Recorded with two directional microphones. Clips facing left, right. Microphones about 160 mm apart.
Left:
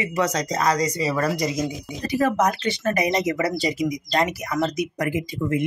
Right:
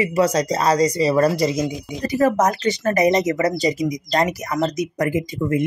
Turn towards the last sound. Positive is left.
turn(degrees=-45)  # may be behind; listen again after turning